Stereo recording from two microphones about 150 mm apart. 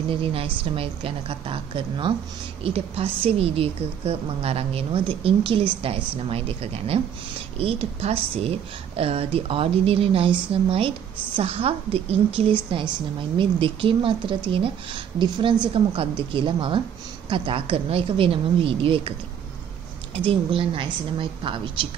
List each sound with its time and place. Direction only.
0.1 s a woman's voice: 40° right (ahead or behind)
20.2 s a woman's voice: 35° right (ahead or behind)